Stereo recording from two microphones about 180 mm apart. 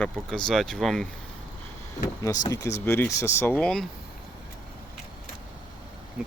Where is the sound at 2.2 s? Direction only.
20° left (ahead or behind); by 3.9 s 5° left (ahead or behind).